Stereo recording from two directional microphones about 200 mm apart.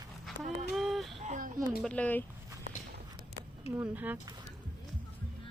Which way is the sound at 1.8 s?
5° left (ahead or behind).